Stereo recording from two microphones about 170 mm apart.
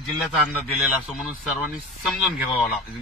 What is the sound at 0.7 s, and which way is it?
Speech, 5° right (ahead or behind).